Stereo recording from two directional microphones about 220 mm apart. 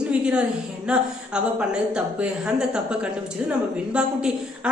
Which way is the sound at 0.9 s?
5° right (ahead or behind).